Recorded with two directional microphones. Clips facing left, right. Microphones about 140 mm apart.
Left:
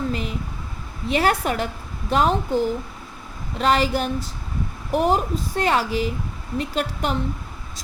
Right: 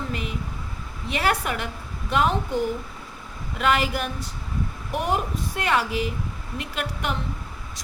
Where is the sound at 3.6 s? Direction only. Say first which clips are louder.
Left 3 dB; 35° left (ahead or behind).